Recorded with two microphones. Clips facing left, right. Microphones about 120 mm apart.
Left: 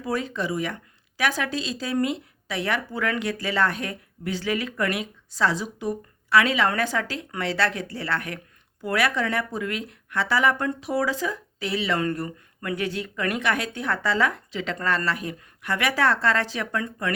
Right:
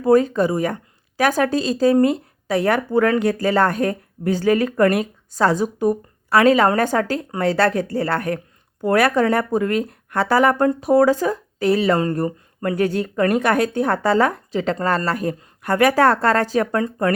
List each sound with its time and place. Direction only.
0.0 s speech: 45° right (ahead or behind)